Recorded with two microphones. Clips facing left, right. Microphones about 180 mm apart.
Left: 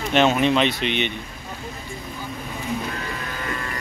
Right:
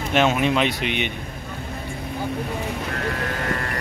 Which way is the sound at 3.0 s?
65° right (ahead or behind).